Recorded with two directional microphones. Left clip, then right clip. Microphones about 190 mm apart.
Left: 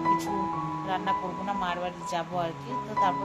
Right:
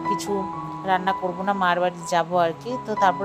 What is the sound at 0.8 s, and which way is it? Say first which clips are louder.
A woman's voice: right 8 dB; 50° right (ahead or behind).